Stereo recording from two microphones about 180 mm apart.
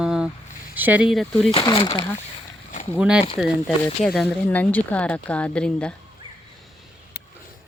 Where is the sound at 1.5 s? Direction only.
30° left (ahead or behind).